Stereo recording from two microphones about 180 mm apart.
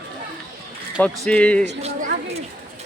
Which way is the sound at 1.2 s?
5° left (ahead or behind).